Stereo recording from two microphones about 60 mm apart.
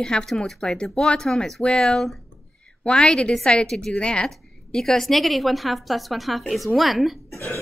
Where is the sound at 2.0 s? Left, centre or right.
Centre.